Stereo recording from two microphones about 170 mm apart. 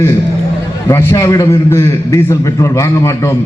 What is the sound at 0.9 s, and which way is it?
A man's voice, 20° left (ahead or behind).